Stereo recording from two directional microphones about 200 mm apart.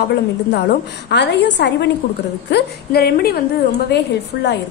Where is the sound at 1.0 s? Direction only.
60° left (ahead or behind).